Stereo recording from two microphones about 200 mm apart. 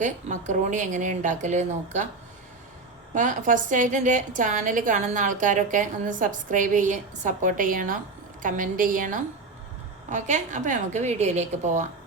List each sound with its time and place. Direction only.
0.0 s a woman's voice: 40° right (ahead or behind)
3.2 s a woman's voice: 40° right (ahead or behind)